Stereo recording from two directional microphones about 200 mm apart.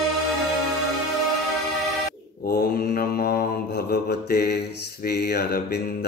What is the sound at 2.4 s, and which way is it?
Mantra, 50° left (ahead or behind).